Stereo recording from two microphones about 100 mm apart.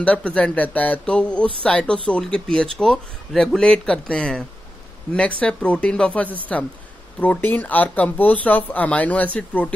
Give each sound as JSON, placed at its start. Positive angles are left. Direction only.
{"t": 0.0, "sound": "speech", "side_deg": 10}